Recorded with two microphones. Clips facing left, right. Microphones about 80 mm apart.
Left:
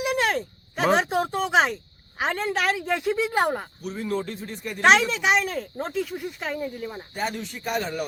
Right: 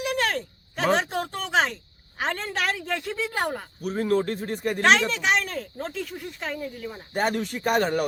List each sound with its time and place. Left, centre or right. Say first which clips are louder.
0.0 s speech: left 2 dB; centre
3.8 s speech: right 5 dB; right
4.8 s speech: left 3 dB; centre
7.1 s speech: right 7 dB; right